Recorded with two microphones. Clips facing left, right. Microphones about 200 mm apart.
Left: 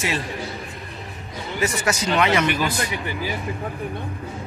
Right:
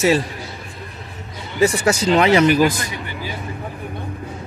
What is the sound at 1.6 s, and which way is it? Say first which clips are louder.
Speech: right 7 dB; 30° right (ahead or behind).